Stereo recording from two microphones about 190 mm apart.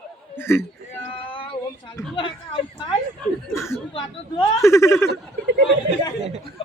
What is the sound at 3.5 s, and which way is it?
Chuckle, 15° left (ahead or behind).